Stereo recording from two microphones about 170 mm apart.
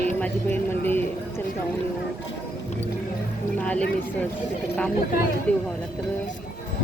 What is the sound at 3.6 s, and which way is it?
Speech, 10° left (ahead or behind).